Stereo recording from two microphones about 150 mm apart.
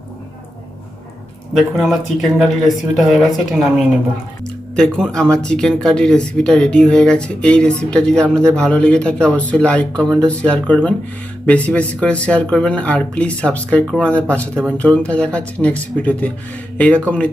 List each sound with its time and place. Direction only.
1.5 s speech: centre (ahead or behind)